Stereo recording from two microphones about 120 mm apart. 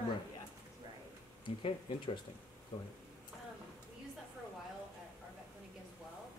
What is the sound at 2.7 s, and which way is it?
Speech, 55° left (ahead or behind).